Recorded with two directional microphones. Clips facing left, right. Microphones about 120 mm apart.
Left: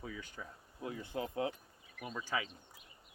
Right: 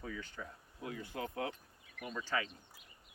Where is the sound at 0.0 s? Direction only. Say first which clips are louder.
Right 1 dB; 10° left (ahead or behind).